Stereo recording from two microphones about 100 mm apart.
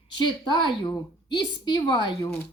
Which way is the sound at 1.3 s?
45° left (ahead or behind).